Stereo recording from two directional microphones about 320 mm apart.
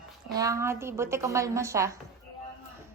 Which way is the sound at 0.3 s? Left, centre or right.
Centre.